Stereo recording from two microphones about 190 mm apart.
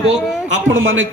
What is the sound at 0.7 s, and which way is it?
Speech, 90° right.